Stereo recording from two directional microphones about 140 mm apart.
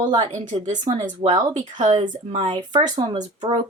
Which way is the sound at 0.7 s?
60° right (ahead or behind).